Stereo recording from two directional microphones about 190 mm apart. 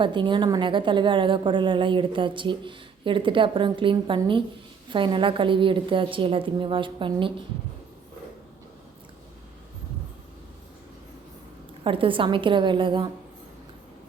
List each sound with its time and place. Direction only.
0.0 s a woman's voice: 25° right (ahead or behind)
11.8 s a woman's voice: 25° right (ahead or behind)